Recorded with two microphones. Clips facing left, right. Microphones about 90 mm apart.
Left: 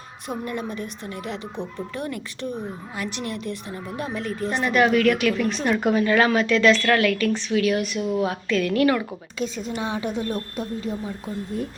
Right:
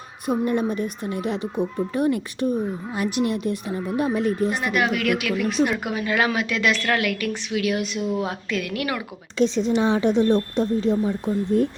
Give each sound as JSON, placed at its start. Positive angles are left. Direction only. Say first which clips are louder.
{"t": 0.4, "sound": "speech", "louder": "right 6 dB", "side_deg": -20}
{"t": 9.6, "sound": "speech", "louder": "right 7 dB", "side_deg": -25}